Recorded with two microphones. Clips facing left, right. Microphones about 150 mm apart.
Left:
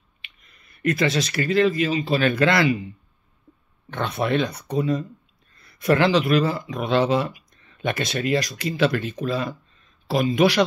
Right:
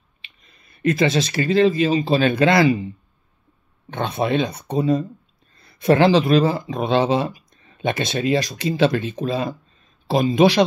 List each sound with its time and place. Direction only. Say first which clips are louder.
0.2 s speech: right 1 dB; 25° right (ahead or behind)
3.9 s speech: right 2 dB; 20° right (ahead or behind)